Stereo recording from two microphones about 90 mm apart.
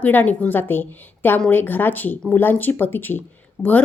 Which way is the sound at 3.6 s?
5° right (ahead or behind).